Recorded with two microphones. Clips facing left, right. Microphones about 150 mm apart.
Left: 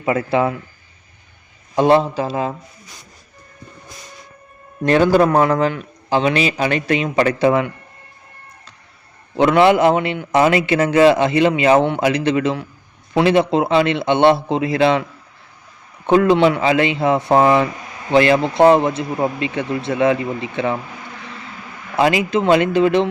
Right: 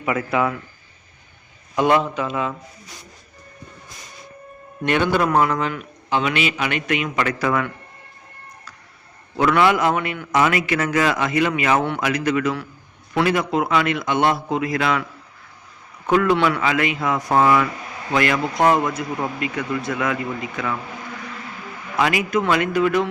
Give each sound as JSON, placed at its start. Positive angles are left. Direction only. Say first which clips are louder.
{"t": 0.0, "sound": "a man's voice", "louder": "left 4 dB", "side_deg": 30}
{"t": 1.7, "sound": "a man's voice", "louder": "left 4 dB", "side_deg": 30}
{"t": 4.8, "sound": "a man's voice", "louder": "left 6 dB", "side_deg": 35}
{"t": 9.4, "sound": "a man's voice", "louder": "left 5 dB", "side_deg": 25}
{"t": 16.0, "sound": "a man's voice", "louder": "left 5 dB", "side_deg": 25}
{"t": 21.9, "sound": "a man's voice", "louder": "left 4 dB", "side_deg": 25}